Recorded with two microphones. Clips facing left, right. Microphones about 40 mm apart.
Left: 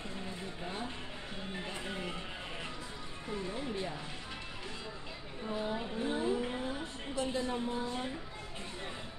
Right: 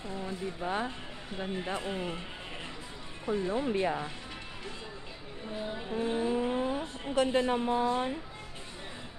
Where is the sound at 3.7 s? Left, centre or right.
Right.